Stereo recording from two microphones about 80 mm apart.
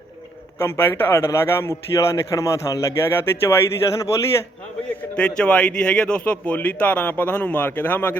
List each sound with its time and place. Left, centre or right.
0.6 s a man's voice: left
3.1 s a man's voice: left
5.4 s speech: centre